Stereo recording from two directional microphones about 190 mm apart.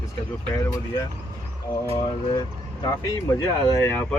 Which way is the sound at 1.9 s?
30° left (ahead or behind).